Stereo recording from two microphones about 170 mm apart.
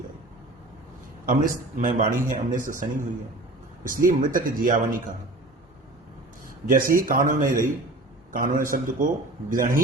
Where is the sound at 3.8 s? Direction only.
55° right (ahead or behind).